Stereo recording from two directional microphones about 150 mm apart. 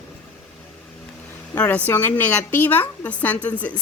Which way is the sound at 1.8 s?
10° left (ahead or behind).